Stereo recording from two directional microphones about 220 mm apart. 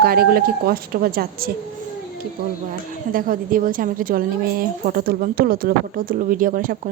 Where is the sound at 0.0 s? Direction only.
45° right (ahead or behind).